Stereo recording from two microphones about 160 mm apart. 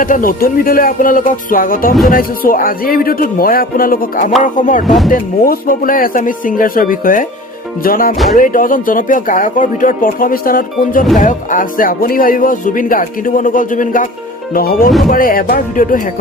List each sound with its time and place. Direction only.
0.0 s speech: 60° left (ahead or behind)
14.5 s speech: 70° left (ahead or behind)